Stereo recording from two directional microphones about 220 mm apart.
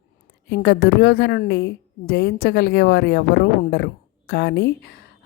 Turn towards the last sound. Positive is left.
turn(degrees=45)  # may be behind; listen again after turning